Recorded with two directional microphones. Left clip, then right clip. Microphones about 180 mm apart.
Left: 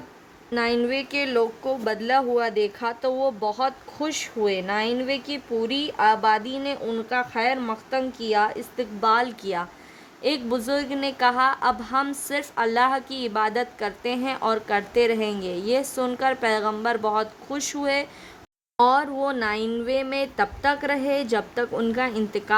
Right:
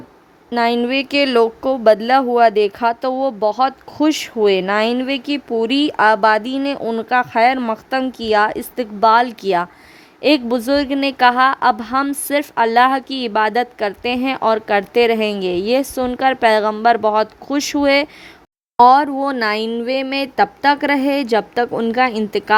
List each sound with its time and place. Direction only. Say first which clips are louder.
0.5 s a woman's voice: right 7 dB; 40° right (ahead or behind)
21.7 s a woman's voice: right 8 dB; 30° right (ahead or behind)